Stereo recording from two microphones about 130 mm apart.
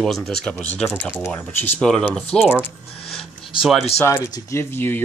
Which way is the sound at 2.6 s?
Centre (ahead or behind).